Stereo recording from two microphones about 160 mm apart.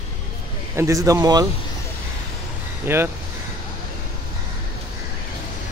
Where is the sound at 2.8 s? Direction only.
15° right (ahead or behind).